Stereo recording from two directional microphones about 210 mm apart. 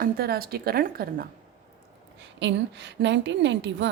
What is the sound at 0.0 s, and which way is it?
A woman's voice, 45° right (ahead or behind).